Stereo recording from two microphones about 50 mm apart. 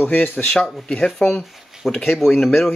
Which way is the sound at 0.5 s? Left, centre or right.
Centre.